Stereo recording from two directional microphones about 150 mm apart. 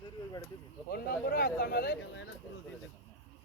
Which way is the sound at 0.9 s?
90° left.